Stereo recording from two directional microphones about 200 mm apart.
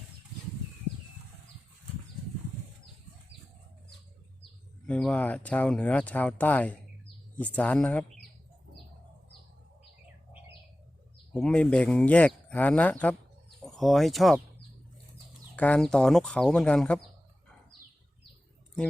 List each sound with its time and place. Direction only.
4.9 s speech: 5° left (ahead or behind)
11.3 s speech: 5° left (ahead or behind)
15.5 s speech: 5° left (ahead or behind)